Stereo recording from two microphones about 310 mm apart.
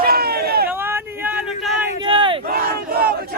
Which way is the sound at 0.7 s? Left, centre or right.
Centre.